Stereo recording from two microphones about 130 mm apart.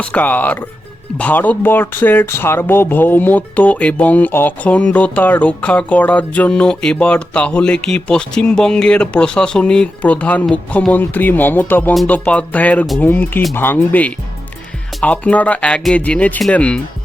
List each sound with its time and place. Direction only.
0.0 s speech: 10° left (ahead or behind)